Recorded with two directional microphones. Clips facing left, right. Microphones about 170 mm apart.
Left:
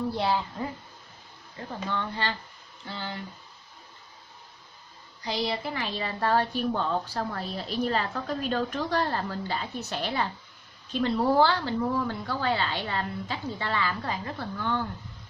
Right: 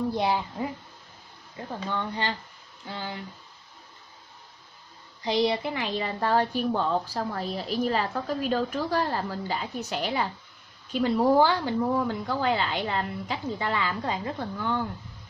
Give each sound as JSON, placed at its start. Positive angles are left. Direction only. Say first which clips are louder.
{"t": 0.1, "sound": "a child's voice", "louder": "right 1 dB", "side_deg": -20}
{"t": 1.9, "sound": "a woman's voice", "louder": "right 1 dB", "side_deg": -15}
{"t": 5.2, "sound": "a woman's voice", "louder": "right 5 dB", "side_deg": -20}
{"t": 14.6, "sound": "a woman's voice", "louder": "even", "side_deg": -10}